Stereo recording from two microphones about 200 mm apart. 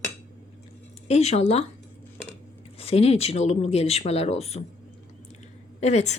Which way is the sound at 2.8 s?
30° left (ahead or behind).